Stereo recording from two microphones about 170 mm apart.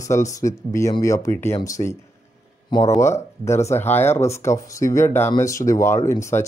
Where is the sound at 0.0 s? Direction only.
20° left (ahead or behind).